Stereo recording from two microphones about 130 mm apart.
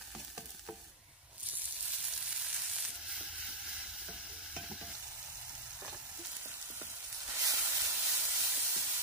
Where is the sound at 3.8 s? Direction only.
5° right (ahead or behind).